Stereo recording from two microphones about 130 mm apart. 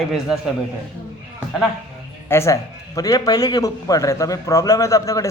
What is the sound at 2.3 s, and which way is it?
A man's voice, 20° left (ahead or behind).